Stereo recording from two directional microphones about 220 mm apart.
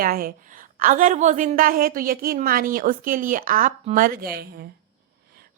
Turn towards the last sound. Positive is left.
turn(degrees=-45)  # may be behind; listen again after turning